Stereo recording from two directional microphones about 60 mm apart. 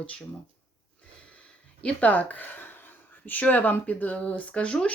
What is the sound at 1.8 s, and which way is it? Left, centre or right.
Speech, left.